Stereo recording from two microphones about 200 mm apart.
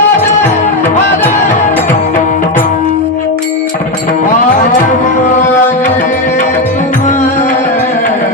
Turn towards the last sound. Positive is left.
turn(degrees=40)  # may be behind; listen again after turning